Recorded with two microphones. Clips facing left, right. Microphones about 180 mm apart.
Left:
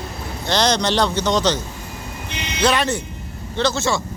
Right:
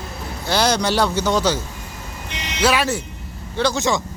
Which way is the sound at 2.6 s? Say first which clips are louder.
Even; 5° right (ahead or behind).